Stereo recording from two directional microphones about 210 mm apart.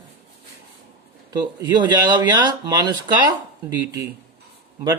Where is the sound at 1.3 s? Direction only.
20° right (ahead or behind).